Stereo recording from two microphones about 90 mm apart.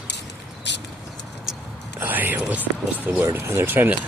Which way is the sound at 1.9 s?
20° right (ahead or behind).